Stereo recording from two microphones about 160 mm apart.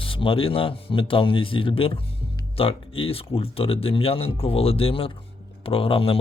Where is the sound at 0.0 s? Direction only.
35° left (ahead or behind).